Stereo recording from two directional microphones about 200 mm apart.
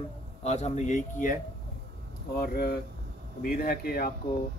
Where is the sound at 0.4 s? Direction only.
35° left (ahead or behind).